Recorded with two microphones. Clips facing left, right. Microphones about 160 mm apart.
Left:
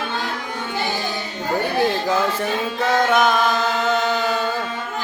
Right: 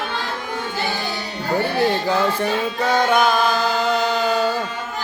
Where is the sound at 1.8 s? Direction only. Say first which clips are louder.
Even; centre (ahead or behind).